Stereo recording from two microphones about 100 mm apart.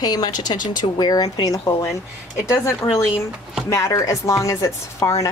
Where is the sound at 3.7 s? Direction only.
30° left (ahead or behind).